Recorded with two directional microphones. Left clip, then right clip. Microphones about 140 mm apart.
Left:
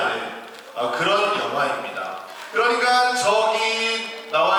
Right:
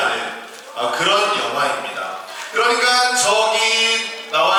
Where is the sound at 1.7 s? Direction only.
25° left (ahead or behind).